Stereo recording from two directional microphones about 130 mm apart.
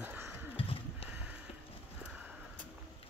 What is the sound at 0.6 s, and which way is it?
Horse, 45° left (ahead or behind).